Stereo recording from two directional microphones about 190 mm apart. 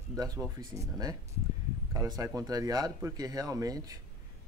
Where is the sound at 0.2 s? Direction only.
20° right (ahead or behind).